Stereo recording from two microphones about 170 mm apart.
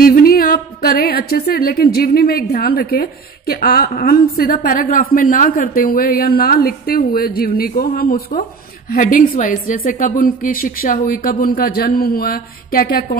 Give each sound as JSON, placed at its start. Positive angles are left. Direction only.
{"t": 0.0, "sound": "speech", "side_deg": 60}